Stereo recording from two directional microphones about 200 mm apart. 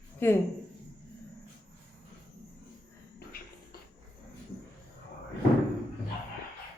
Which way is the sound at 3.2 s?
50° left (ahead or behind).